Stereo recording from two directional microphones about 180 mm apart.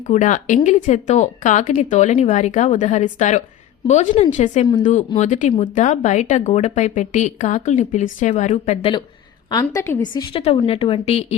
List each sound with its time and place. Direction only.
0.1 s a woman's voice: 45° left (ahead or behind); by 10.2 s 15° left (ahead or behind)
10.3 s speech: 30° left (ahead or behind)